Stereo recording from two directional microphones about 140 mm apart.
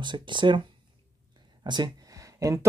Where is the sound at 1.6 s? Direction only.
30° right (ahead or behind).